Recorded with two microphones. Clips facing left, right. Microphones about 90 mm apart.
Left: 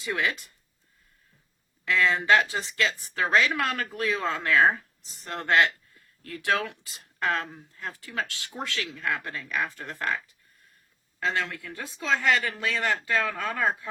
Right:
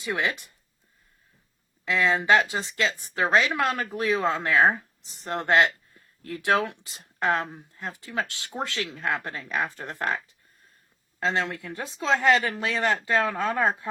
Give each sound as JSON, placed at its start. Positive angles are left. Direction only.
{"t": 0.0, "sound": "speech", "side_deg": -20}
{"t": 1.8, "sound": "speech", "side_deg": -20}
{"t": 11.2, "sound": "speech", "side_deg": -25}